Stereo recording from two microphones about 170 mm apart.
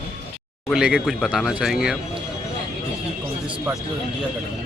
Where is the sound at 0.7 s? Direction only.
5° right (ahead or behind).